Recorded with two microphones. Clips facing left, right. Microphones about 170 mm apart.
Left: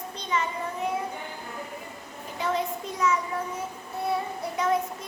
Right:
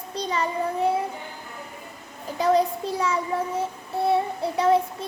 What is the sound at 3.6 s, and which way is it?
Child singing, 30° right (ahead or behind).